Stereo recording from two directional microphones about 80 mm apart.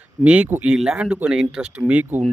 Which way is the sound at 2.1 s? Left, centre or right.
Right.